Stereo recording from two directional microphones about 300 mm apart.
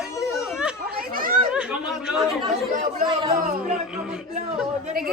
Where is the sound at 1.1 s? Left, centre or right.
Right.